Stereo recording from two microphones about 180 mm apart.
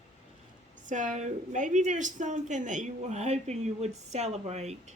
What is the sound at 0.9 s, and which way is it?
A woman's voice, 45° right (ahead or behind).